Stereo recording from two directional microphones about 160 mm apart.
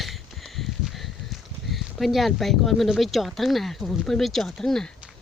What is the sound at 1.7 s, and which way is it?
Speech, centre (ahead or behind).